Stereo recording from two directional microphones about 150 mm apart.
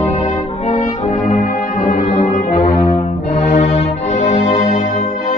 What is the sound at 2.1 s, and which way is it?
Music, 50° left (ahead or behind).